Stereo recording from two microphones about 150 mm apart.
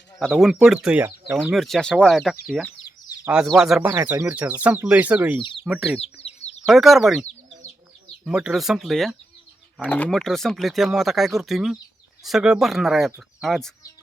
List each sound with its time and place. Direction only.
0.2 s speech: centre (ahead or behind)
1.5 s speech: centre (ahead or behind)
5.4 s speech: 35° left (ahead or behind)
5.6 s speech: 10° right (ahead or behind)
6.0 s chicken: 40° left (ahead or behind)
6.7 s speech: centre (ahead or behind)